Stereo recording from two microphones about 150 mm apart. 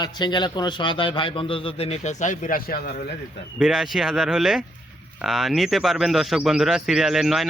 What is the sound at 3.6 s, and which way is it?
Speech, 5° right (ahead or behind).